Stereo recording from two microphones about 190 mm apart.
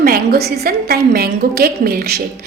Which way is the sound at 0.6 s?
55° right (ahead or behind).